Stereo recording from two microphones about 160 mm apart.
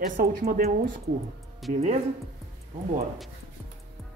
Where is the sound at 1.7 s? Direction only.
45° right (ahead or behind).